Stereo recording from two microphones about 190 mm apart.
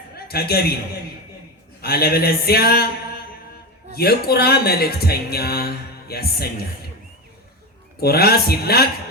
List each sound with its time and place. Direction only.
0.3 s speech: 55° left (ahead or behind)
1.8 s speech: 55° left (ahead or behind)
8.0 s speech: 55° left (ahead or behind)